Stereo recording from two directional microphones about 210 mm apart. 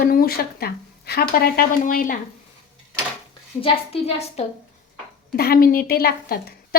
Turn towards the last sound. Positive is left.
turn(degrees=45)  # may be behind; listen again after turning